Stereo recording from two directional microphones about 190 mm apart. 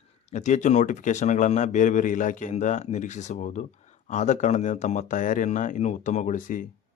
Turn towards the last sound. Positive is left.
turn(degrees=45)  # may be behind; listen again after turning